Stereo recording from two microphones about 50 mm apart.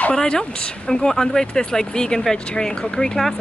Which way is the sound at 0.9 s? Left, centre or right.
Centre.